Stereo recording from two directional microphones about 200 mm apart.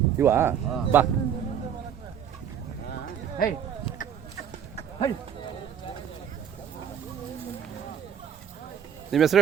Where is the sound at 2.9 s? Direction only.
45° left (ahead or behind).